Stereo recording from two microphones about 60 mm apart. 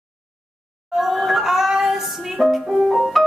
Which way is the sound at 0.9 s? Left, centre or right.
Centre.